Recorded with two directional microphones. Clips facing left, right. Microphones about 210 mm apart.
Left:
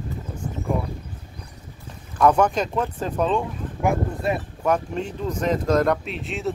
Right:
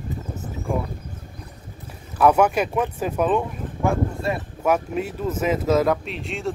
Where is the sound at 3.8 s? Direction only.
20° left (ahead or behind).